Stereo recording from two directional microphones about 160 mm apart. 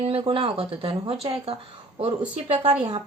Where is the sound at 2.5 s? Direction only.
35° right (ahead or behind).